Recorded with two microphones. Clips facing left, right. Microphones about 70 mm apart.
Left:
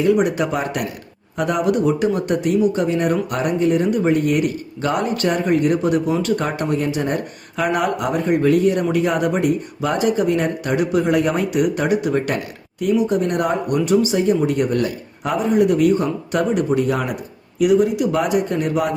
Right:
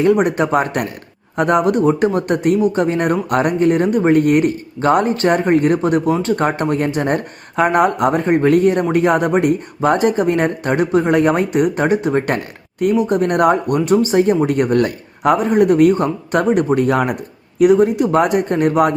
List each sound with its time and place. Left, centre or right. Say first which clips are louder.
0.0 s speech: right 3 dB; right